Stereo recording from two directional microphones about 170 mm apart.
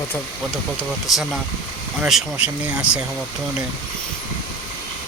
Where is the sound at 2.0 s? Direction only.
5° right (ahead or behind).